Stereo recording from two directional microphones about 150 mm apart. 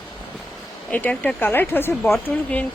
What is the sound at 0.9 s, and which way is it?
Speech, 10° left (ahead or behind).